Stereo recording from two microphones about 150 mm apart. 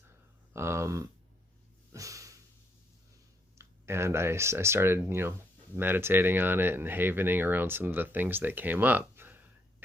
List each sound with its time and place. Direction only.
0.5 s speech: 15° right (ahead or behind)
1.9 s a sound: 20° right (ahead or behind)
3.6 s speech: 15° right (ahead or behind)